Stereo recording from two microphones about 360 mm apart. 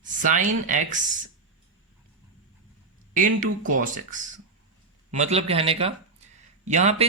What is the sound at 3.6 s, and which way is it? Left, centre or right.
Speech, right.